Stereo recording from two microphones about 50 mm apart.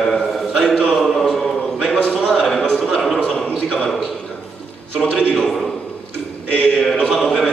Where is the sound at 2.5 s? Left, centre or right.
Centre.